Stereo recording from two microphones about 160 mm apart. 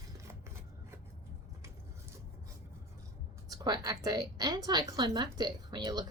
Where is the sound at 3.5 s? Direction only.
25° right (ahead or behind).